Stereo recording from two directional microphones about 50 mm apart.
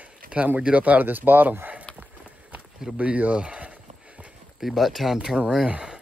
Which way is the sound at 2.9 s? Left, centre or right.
Right.